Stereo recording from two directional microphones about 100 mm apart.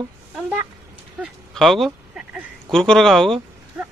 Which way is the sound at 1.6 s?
Centre (ahead or behind).